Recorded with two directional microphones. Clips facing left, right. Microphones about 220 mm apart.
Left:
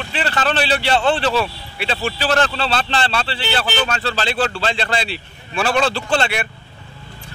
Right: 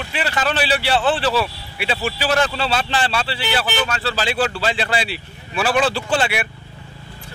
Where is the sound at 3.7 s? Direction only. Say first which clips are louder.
Left 1 dB; 25° left (ahead or behind).